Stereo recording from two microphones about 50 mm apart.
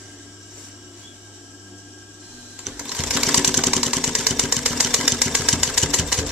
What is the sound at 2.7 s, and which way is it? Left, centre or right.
Sewing machine, centre.